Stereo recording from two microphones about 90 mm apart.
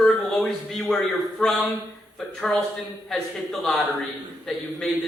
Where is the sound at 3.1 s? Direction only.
5° left (ahead or behind).